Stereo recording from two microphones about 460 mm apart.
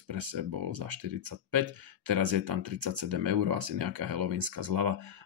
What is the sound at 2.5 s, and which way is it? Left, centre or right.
Speech, right.